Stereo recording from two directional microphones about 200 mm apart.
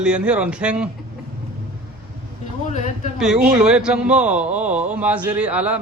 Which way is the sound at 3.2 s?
Centre (ahead or behind).